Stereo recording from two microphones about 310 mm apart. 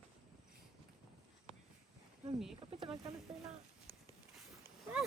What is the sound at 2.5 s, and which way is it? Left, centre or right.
Speech, centre.